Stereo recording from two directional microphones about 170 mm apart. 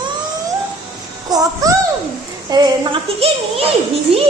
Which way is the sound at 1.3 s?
20° right (ahead or behind).